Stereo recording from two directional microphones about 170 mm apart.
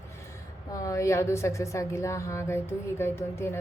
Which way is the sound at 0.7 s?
20° left (ahead or behind).